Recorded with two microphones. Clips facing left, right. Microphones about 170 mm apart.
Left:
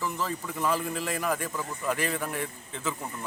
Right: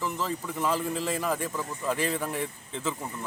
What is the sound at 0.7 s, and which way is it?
Speech, 25° right (ahead or behind).